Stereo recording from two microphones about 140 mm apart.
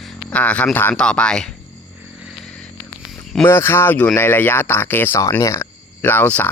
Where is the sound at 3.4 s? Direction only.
15° left (ahead or behind).